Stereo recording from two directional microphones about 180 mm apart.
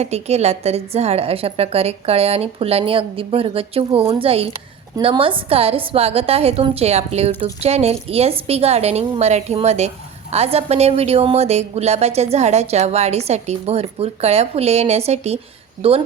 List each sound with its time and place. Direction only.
0.0 s a woman's voice: 35° right (ahead or behind)